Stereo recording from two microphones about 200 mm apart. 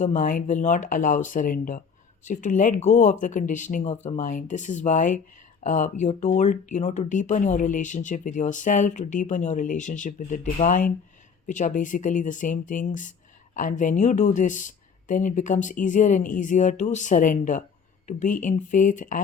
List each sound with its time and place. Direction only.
0.0 s speech: 40° left (ahead or behind)